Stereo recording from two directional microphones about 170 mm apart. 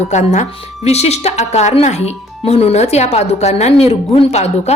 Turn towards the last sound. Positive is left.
turn(degrees=40)  # may be behind; listen again after turning